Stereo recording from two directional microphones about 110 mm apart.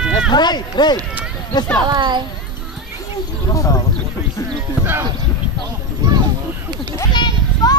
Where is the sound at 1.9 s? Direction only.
45° right (ahead or behind).